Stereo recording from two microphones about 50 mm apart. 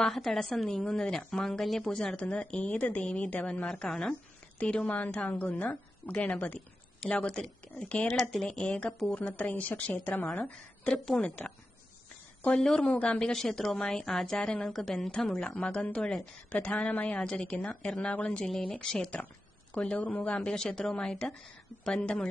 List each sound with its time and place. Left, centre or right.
0.0 s a woman's voice: centre
2.2 s a woman's voice: left
4.6 s a woman's voice: left
7.2 s speech: centre
8.1 s a woman's voice: centre
8.6 s a woman's voice: left
10.9 s speech: centre
12.7 s speech: centre
14.4 s a woman's voice: left
14.7 s a woman's voice: centre
16.4 s a woman's voice: left
20.0 s a woman's voice: left
20.3 s speech: centre